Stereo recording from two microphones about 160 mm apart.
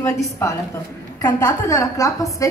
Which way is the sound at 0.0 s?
15° left (ahead or behind).